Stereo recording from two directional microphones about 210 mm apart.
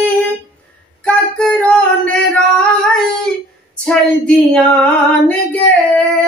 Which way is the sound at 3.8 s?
5° left (ahead or behind).